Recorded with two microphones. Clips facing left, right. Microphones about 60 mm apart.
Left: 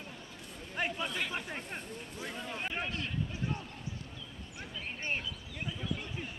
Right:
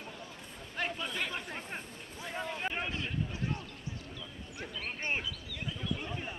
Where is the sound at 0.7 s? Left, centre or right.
Centre.